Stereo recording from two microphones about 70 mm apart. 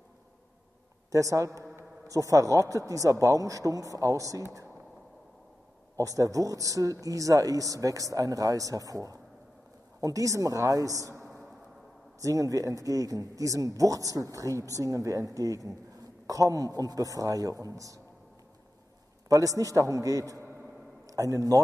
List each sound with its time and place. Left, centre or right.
1.1 s speech: right
5.9 s a woman's voice: right
19.2 s a man's voice: right